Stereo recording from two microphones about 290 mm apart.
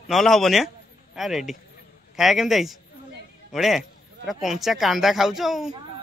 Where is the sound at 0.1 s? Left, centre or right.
Centre.